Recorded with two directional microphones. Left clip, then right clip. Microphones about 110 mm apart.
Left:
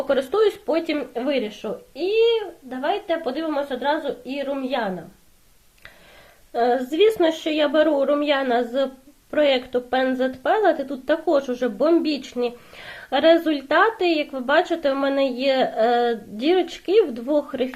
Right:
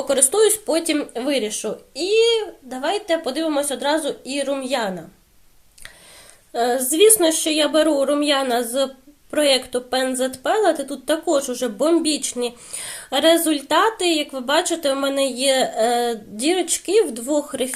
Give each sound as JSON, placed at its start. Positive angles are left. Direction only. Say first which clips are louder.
{"t": 0.1, "sound": "speech", "louder": "right 3 dB", "side_deg": -25}
{"t": 6.5, "sound": "a woman's voice", "louder": "even", "side_deg": -25}